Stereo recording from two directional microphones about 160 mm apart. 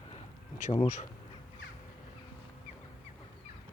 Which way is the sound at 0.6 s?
45° left (ahead or behind).